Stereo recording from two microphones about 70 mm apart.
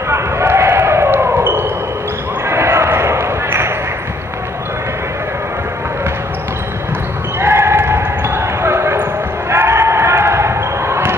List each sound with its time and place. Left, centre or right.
0.1 s basketball bounce: right
7.3 s basketball bounce: right
9.5 s a sound: right